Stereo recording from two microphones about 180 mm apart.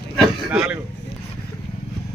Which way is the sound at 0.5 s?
5° right (ahead or behind).